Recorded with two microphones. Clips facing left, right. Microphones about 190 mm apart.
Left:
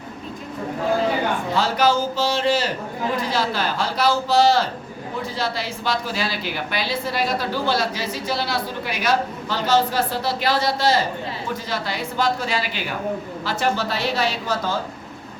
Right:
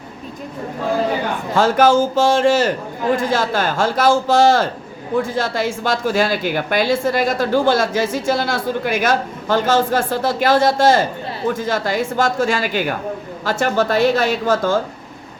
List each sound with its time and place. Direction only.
1.5 s a woman's voice: 50° right (ahead or behind)